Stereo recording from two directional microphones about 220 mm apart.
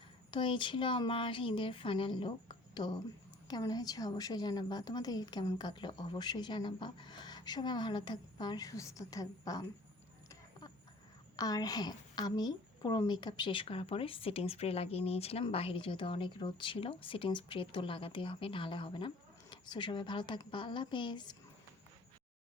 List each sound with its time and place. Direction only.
0.3 s a woman's voice: 20° left (ahead or behind)
11.3 s a woman's voice: 15° left (ahead or behind)